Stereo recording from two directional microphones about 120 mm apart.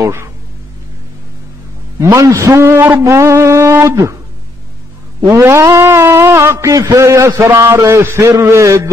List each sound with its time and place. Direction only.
0.0 s speech: 20° right (ahead or behind)
2.0 s a man's voice: 25° right (ahead or behind)
5.2 s a sound: 25° right (ahead or behind)